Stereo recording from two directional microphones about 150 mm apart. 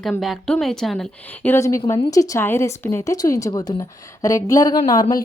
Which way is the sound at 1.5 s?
20° left (ahead or behind).